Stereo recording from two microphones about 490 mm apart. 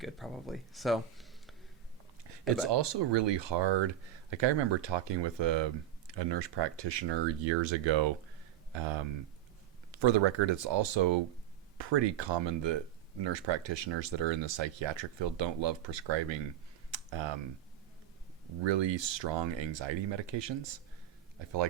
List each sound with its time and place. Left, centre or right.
0.0 s speech: centre
2.6 s speech: right
16.9 s computer keyboard: right
18.6 s speech: right